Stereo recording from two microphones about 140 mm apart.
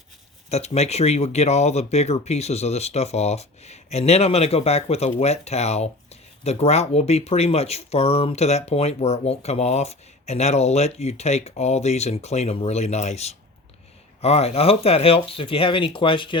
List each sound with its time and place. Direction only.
0.5 s speech: 50° left (ahead or behind)